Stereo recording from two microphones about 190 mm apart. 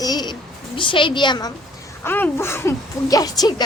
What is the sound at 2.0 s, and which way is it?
Speech, 10° left (ahead or behind).